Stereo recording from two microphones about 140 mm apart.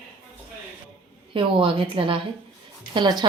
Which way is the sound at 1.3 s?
40° right (ahead or behind).